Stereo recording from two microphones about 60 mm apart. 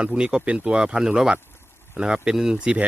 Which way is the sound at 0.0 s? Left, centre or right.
Centre.